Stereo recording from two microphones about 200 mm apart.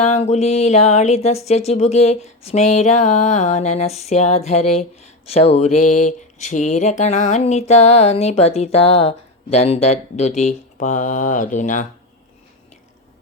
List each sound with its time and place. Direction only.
0.0 s speech: 35° left (ahead or behind)